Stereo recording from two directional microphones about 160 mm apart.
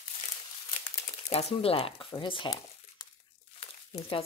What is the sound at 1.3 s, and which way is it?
Speech, 40° left (ahead or behind).